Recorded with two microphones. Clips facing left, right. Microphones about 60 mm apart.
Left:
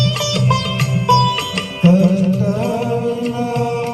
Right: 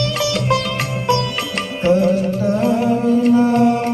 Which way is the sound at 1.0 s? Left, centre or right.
Right.